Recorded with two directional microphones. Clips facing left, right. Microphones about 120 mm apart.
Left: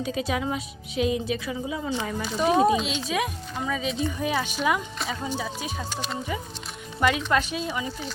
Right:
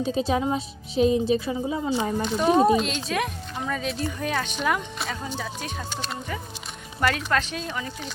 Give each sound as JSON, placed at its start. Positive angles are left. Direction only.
{"t": 0.0, "sound": "a woman's voice", "side_deg": -30}
{"t": 1.8, "sound": "speech", "side_deg": -10}
{"t": 2.2, "sound": "speech", "side_deg": 0}
{"t": 7.3, "sound": "speech", "side_deg": 10}